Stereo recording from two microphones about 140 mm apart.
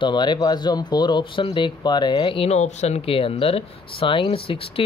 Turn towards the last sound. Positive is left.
turn(degrees=40)  # may be behind; listen again after turning